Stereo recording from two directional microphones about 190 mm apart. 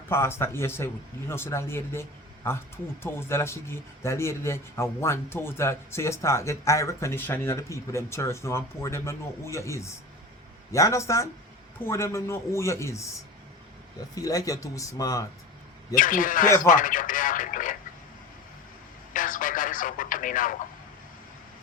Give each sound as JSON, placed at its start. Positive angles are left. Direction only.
{"t": 0.1, "sound": "speech", "side_deg": 15}
{"t": 14.2, "sound": "a man's voice", "side_deg": 20}
{"t": 16.0, "sound": "speech", "side_deg": 45}
{"t": 19.1, "sound": "speech", "side_deg": 45}